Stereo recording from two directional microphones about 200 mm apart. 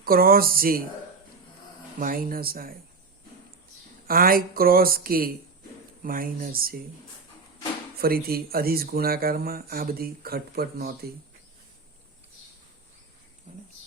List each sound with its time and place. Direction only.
0.0 s speech: 45° right (ahead or behind)
2.0 s speech: 45° right (ahead or behind)
4.0 s speech: 45° right (ahead or behind)
7.9 s speech: 50° right (ahead or behind)
13.5 s whispering: 35° right (ahead or behind)